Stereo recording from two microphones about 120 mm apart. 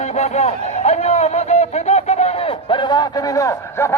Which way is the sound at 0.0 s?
65° left (ahead or behind).